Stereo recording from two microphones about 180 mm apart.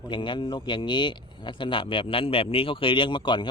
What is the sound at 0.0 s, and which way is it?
Speech, 25° left (ahead or behind).